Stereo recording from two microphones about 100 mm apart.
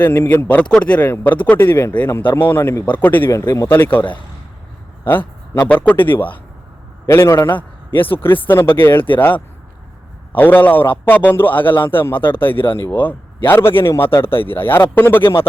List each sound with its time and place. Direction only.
0.0 s speech: 20° left (ahead or behind)
3.2 s speech: 30° left (ahead or behind)
3.7 s a man's voice: 20° left (ahead or behind)
10.3 s a man's voice: 20° left (ahead or behind)
11.6 s speech: 55° left (ahead or behind)
11.9 s speech: 20° left (ahead or behind)
12.5 s speech: 55° left (ahead or behind)
12.9 s speech: 20° left (ahead or behind)